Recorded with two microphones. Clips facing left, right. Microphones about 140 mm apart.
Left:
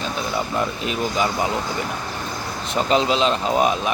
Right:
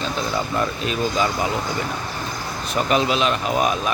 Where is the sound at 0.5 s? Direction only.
20° left (ahead or behind).